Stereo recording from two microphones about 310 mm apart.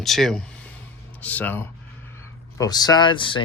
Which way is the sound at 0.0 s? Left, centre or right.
Centre.